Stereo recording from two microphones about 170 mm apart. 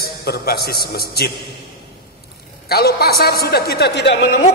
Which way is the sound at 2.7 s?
65° left (ahead or behind).